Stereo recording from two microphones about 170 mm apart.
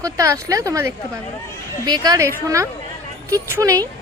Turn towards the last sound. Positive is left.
turn(degrees=-20)  # may be behind; listen again after turning